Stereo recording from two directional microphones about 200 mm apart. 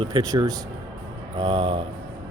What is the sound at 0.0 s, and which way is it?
A man's voice, 20° right (ahead or behind).